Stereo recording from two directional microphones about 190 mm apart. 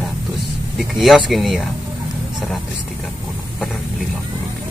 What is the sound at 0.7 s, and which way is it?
Speech, centre (ahead or behind).